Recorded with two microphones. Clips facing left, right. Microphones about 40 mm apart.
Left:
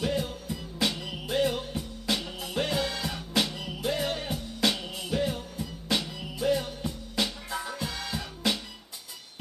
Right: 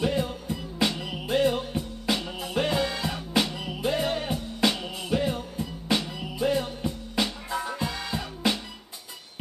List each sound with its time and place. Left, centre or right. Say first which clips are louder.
0.0 s music: right 3 dB; centre